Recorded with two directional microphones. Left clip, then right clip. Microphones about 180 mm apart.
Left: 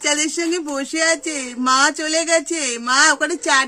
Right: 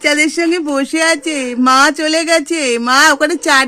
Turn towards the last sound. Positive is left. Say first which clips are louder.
# right 6 dB
turn(degrees=-35)  # may be behind; listen again after turning